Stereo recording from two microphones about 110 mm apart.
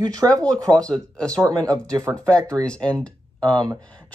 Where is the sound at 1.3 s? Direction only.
35° right (ahead or behind).